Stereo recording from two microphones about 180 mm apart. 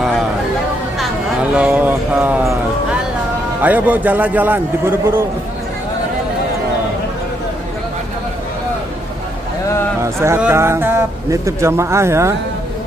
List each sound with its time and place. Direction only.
1.5 s a sound: 5° right (ahead or behind)
3.6 s speech: 10° right (ahead or behind)
10.0 s speech: 15° right (ahead or behind)